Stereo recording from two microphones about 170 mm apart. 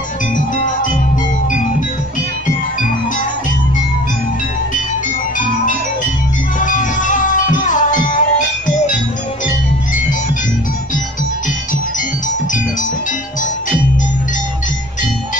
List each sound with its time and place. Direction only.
6.6 s music: 50° left (ahead or behind)